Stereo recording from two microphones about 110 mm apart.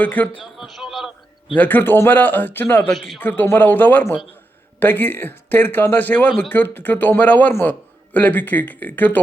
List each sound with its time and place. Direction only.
0.0 s speech: 15° left (ahead or behind)
0.4 s a man's voice: 5° right (ahead or behind)
1.5 s speech: 15° left (ahead or behind)